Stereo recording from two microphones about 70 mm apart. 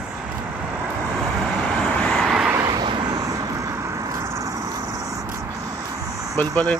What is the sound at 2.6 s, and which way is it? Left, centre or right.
Vehicle, right.